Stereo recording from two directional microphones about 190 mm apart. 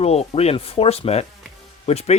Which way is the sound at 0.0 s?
35° left (ahead or behind).